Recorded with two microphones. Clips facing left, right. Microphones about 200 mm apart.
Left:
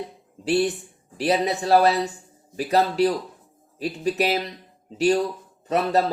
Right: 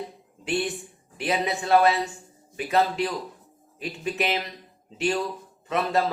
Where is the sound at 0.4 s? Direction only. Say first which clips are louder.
Left 6 dB; 35° left (ahead or behind).